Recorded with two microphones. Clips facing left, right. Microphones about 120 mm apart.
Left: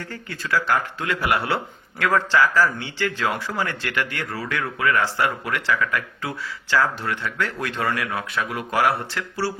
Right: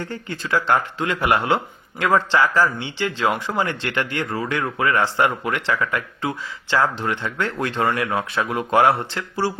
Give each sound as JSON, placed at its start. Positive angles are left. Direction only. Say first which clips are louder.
{"t": 0.0, "sound": "speech", "louder": "right 4 dB", "side_deg": -25}